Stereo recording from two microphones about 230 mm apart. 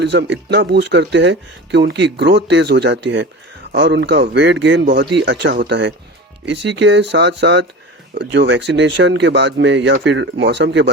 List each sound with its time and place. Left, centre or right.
0.0 s speech: right